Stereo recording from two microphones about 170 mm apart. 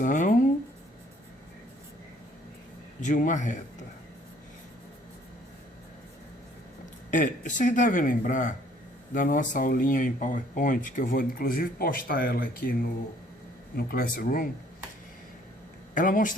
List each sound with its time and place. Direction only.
0.0 s speech: 50° left (ahead or behind)
3.0 s speech: 50° left (ahead or behind)
7.1 s speech: 45° left (ahead or behind)
13.7 s speech: 60° left (ahead or behind)
16.0 s speech: 50° left (ahead or behind)